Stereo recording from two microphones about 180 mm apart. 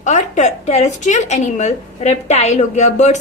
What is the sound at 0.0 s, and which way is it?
A woman's voice, 40° left (ahead or behind).